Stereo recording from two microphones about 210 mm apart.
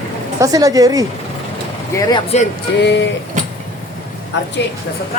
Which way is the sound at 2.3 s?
30° left (ahead or behind).